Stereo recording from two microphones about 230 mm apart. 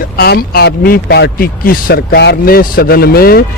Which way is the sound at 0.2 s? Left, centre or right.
Left.